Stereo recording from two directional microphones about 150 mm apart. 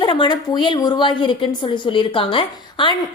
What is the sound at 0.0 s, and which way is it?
A woman's voice, 30° left (ahead or behind).